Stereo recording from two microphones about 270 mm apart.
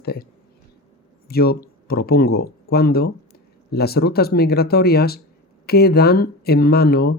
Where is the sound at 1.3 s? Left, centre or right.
Left.